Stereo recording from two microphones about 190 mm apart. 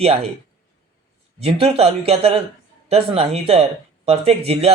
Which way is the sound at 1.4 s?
30° right (ahead or behind).